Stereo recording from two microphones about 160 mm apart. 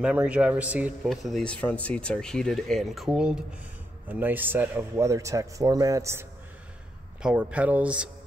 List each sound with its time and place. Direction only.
0.0 s a man's voice: 10° right (ahead or behind)
7.2 s a man's voice: 5° right (ahead or behind)